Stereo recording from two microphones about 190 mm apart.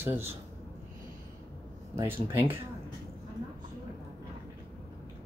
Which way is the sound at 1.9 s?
15° right (ahead or behind).